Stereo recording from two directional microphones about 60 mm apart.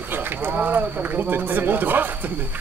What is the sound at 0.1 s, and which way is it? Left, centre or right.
Speech, right.